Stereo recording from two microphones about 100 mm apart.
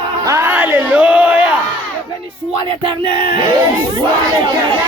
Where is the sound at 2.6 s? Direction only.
55° right (ahead or behind).